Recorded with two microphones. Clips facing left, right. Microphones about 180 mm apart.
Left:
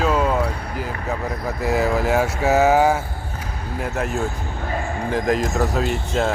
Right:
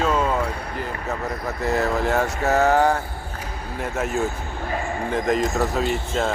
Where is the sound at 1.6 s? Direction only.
Centre (ahead or behind).